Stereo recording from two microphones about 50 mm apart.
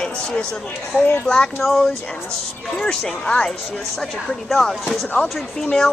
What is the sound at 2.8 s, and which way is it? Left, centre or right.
Speech, centre.